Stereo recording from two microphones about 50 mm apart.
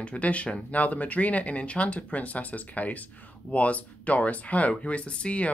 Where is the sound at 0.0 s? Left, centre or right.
Left.